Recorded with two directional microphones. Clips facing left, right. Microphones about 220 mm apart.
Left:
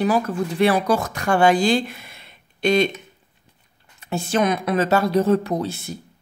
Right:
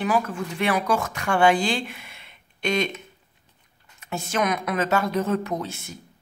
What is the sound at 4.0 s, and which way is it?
Speech, 30° left (ahead or behind).